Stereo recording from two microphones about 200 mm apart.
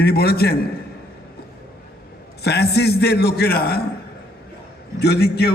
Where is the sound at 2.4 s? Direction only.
55° left (ahead or behind).